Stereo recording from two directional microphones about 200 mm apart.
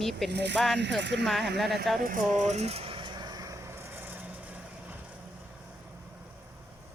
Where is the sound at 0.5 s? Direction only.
Centre (ahead or behind).